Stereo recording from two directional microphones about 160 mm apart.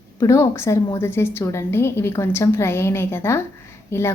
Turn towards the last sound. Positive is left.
turn(degrees=15)  # may be behind; listen again after turning